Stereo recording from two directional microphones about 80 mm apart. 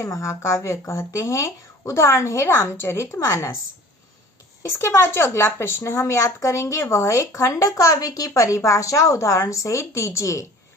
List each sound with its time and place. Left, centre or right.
0.0 s speech: left
4.8 s speech: left